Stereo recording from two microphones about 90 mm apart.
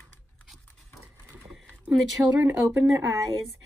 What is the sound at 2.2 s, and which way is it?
Speech, 10° right (ahead or behind).